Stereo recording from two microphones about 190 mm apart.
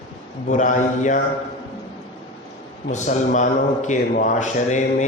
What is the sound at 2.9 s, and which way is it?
A man's voice, 40° left (ahead or behind).